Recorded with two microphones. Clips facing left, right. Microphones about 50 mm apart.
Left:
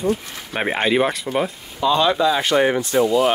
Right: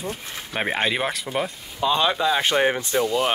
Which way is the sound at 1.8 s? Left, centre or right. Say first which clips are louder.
Left 4 dB; centre.